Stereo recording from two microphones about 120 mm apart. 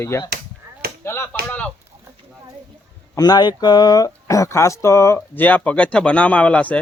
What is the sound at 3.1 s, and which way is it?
Speech, 35° left (ahead or behind).